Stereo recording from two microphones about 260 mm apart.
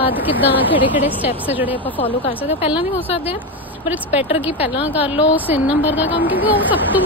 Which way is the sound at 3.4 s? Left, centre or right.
Centre.